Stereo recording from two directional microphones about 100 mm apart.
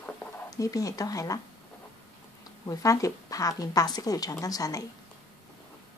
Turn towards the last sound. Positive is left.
turn(degrees=35)  # may be behind; listen again after turning